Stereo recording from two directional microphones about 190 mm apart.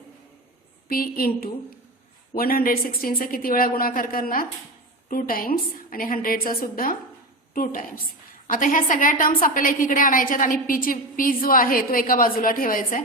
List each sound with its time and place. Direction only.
0.9 s a woman's voice: 50° left (ahead or behind)